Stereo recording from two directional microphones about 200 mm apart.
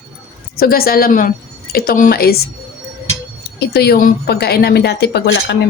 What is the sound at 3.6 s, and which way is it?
A woman's voice, 55° left (ahead or behind).